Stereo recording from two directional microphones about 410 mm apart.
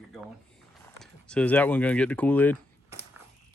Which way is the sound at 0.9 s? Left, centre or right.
Centre.